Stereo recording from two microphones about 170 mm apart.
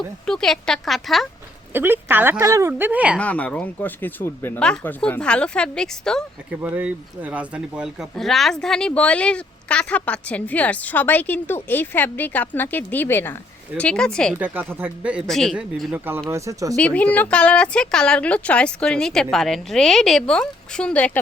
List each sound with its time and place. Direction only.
0.3 s speech: 5° left (ahead or behind)
1.7 s speech: 15° right (ahead or behind)
3.2 s speech: 10° left (ahead or behind)
6.5 s speech: 10° right (ahead or behind)
14.3 s speech: 10° right (ahead or behind)
16.7 s speech: 10° left (ahead or behind)